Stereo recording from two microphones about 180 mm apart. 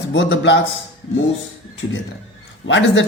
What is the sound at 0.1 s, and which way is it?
Speech, 80° left.